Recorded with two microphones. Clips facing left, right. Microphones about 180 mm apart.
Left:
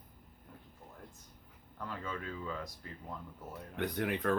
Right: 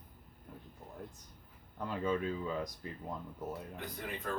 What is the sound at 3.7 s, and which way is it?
Speech, 70° left (ahead or behind).